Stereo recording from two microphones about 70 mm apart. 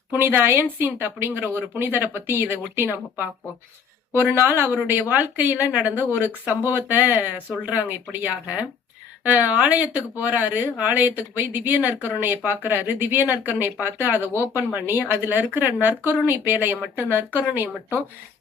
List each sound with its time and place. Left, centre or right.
0.1 s a woman's voice: right